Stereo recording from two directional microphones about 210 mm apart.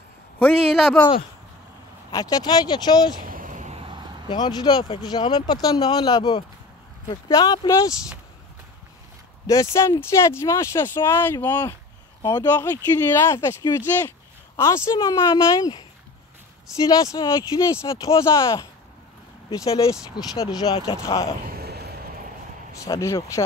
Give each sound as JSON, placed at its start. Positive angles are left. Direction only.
{"t": 0.4, "sound": "speech", "side_deg": 0}
{"t": 2.0, "sound": "speech", "side_deg": 15}
{"t": 3.3, "sound": "a sound", "side_deg": -40}
{"t": 4.3, "sound": "speech", "side_deg": 20}
{"t": 9.5, "sound": "speech", "side_deg": 15}
{"t": 17.0, "sound": "speech", "side_deg": 20}
{"t": 20.2, "sound": "speech", "side_deg": 20}
{"t": 21.5, "sound": "a sound", "side_deg": -50}
{"t": 22.8, "sound": "speech", "side_deg": 15}